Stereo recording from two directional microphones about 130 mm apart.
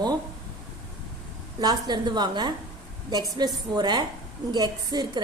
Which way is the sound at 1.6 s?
35° right (ahead or behind).